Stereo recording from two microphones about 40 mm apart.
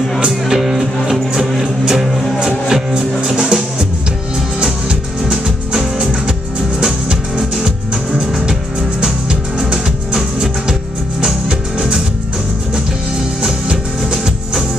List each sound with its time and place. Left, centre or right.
0.5 s music: centre
2.7 s music: right
5.7 s music: centre
9.0 s music: right
13.4 s music: right